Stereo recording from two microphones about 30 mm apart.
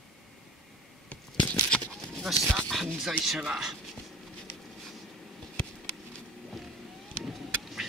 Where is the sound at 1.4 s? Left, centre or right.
Left.